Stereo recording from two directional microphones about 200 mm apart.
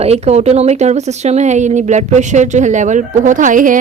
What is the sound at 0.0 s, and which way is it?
Speech, 30° right (ahead or behind).